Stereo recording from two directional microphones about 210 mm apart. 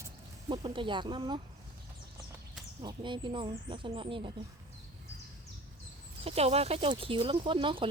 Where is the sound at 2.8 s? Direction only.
20° right (ahead or behind).